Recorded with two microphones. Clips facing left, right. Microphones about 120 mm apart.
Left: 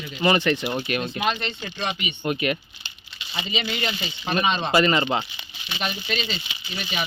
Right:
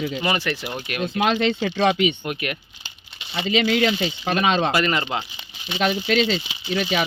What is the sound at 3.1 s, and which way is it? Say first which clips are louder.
Speech: right 8 dB; 65° right (ahead or behind).